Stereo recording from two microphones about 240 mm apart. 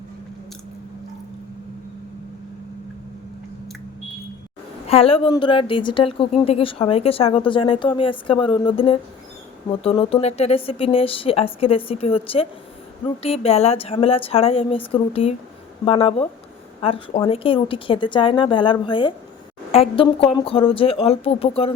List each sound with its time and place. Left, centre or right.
4.9 s a woman's voice: left